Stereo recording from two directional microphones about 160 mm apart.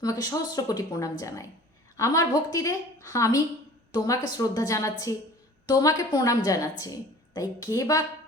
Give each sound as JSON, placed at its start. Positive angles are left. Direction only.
{"t": 0.0, "sound": "a woman's voice", "side_deg": 20}